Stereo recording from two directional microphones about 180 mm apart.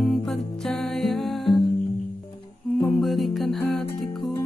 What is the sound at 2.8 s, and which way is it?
Music, centre (ahead or behind).